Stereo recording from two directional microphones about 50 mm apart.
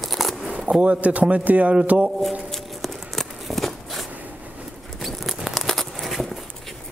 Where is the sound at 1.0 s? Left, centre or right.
Right.